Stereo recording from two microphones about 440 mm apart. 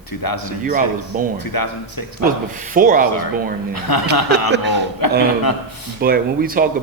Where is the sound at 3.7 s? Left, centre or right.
Left.